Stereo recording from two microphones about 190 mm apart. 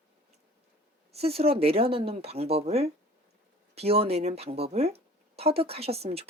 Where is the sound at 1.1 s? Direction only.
30° right (ahead or behind).